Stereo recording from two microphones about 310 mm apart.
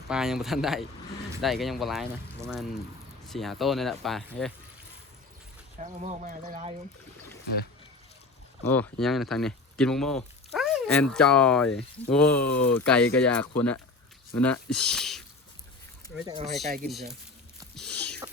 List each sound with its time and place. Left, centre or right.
0.1 s speech: centre
5.8 s speech: right
8.6 s speech: centre
16.1 s speech: centre
16.8 s speech: centre
17.7 s a sound: centre